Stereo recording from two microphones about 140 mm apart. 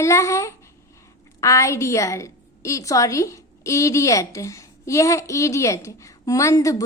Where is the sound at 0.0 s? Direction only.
20° left (ahead or behind).